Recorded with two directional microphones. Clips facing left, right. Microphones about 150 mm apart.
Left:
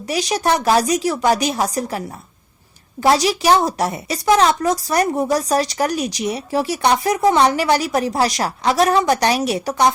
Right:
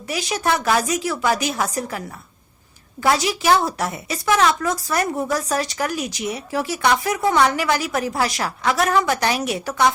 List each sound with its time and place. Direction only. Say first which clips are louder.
0.1 s a woman's voice: left 4 dB; 35° left (ahead or behind)